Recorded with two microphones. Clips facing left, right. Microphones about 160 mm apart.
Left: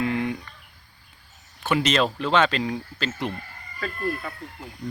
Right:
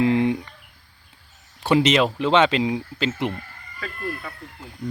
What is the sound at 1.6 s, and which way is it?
Speech, 25° right (ahead or behind).